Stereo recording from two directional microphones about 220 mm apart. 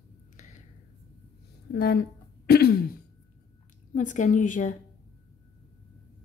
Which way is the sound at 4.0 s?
35° left (ahead or behind).